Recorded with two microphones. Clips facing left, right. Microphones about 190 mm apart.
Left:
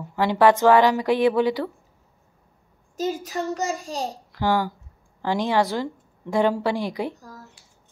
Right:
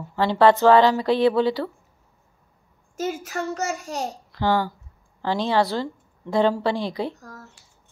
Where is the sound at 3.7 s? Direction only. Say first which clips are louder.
Even; 35° left (ahead or behind).